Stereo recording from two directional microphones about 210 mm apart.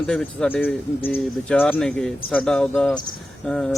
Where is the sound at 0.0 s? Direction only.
5° left (ahead or behind).